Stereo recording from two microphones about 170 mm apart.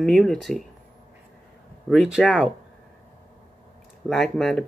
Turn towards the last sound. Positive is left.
turn(degrees=0)  # may be behind; listen again after turning